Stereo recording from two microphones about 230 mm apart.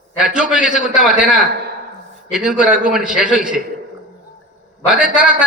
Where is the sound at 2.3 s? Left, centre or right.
Centre.